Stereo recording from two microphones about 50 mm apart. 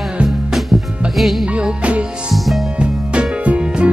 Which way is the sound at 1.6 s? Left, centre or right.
Right.